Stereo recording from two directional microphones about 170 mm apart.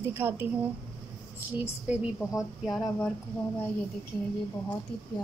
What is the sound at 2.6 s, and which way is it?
Speech, centre (ahead or behind).